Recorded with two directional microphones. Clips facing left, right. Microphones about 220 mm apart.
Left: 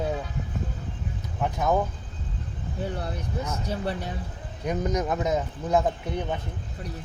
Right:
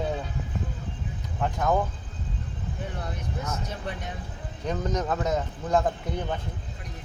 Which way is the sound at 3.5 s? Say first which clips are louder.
Left 4 dB; 35° left (ahead or behind).